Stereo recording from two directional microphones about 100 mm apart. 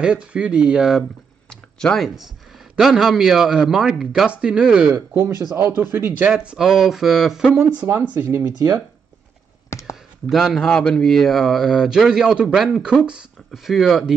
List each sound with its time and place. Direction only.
0.0 s speech: 10° right (ahead or behind)
1.5 s a sound: 5° left (ahead or behind)
2.8 s speech: centre (ahead or behind)
4.9 s speech: 25° right (ahead or behind)
6.3 s speech: 10° right (ahead or behind)
7.5 s speech: 20° right (ahead or behind)
9.7 s a sound: 30° left (ahead or behind)
10.2 s speech: centre (ahead or behind)